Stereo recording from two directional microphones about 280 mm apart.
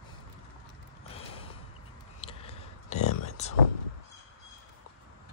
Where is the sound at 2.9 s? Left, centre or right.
Left.